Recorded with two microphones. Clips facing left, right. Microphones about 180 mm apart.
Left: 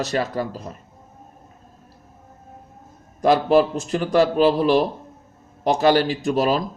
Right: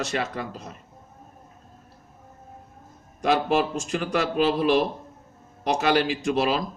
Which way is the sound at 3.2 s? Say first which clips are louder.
Left 6 dB; 35° left (ahead or behind).